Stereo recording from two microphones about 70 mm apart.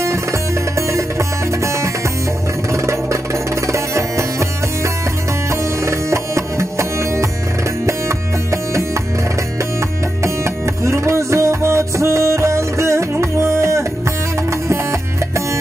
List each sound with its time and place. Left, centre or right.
0.0 s music: right
10.2 s music: right